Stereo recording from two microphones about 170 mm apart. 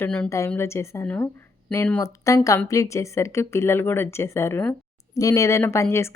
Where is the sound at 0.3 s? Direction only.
15° left (ahead or behind).